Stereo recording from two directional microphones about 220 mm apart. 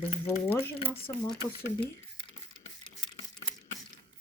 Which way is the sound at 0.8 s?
25° left (ahead or behind).